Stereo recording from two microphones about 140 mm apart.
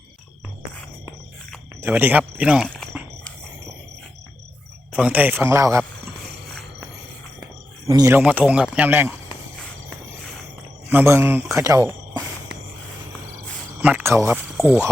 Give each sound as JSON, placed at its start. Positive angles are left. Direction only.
{"t": 1.8, "sound": "speech", "side_deg": -15}
{"t": 4.9, "sound": "speech", "side_deg": -10}
{"t": 7.9, "sound": "speech", "side_deg": -30}
{"t": 8.1, "sound": "speech", "side_deg": -10}
{"t": 10.9, "sound": "speech", "side_deg": -15}
{"t": 13.8, "sound": "speech", "side_deg": -15}